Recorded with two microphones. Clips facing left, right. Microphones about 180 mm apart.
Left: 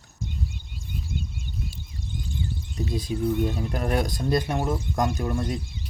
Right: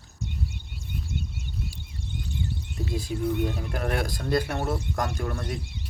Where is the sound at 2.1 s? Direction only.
65° right (ahead or behind).